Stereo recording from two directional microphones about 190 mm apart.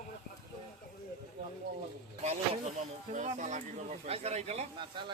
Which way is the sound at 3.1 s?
40° right (ahead or behind).